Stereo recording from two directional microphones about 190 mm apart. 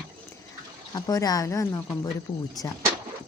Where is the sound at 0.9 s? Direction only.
20° left (ahead or behind).